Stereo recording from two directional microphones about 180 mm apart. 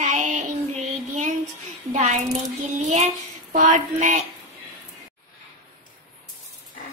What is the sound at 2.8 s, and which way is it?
Child singing, 40° right (ahead or behind).